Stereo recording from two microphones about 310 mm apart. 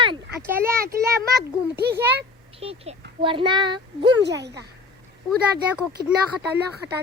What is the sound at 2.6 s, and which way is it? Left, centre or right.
Speech, centre.